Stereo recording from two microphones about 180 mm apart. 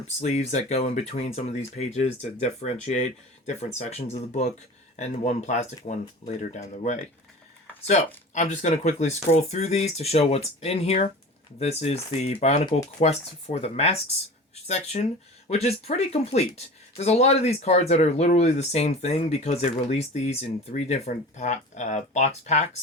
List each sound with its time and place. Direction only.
0.2 s speech: 40° left (ahead or behind)